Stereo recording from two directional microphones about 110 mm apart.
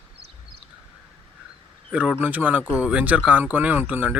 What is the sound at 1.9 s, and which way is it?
Speech, 10° right (ahead or behind).